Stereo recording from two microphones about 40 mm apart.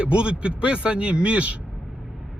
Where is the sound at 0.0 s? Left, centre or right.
Right.